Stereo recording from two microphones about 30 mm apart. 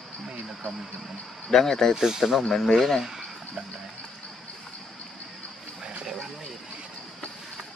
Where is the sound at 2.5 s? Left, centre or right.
Centre.